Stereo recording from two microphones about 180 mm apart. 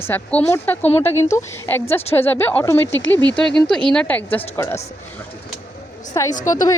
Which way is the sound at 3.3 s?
5° left (ahead or behind).